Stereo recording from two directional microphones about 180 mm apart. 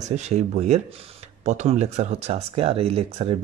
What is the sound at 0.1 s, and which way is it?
Speech, 40° right (ahead or behind).